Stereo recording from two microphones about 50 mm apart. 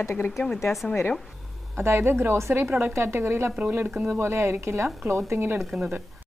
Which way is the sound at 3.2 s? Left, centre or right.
Right.